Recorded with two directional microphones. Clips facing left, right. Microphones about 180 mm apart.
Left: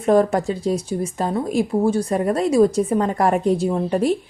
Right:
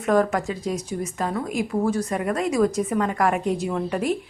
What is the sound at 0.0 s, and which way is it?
A woman's voice, 30° left (ahead or behind).